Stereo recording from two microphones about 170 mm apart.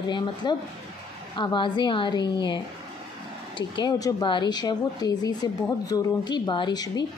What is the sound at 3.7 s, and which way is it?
Speech, 25° left (ahead or behind).